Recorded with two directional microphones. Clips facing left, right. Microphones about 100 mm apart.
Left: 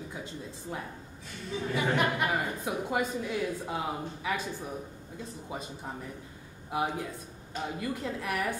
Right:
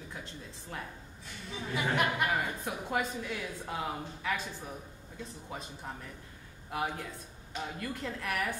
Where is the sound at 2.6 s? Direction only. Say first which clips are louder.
Left 3 dB; 5° left (ahead or behind).